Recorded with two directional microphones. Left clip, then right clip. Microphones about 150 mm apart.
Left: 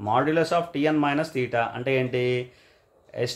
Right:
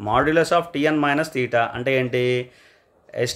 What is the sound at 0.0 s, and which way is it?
Speech, 45° right (ahead or behind).